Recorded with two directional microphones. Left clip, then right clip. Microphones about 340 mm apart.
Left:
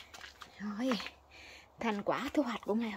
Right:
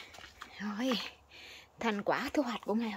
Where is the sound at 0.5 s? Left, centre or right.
Centre.